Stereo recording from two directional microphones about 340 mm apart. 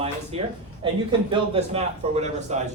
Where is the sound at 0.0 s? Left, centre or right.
Centre.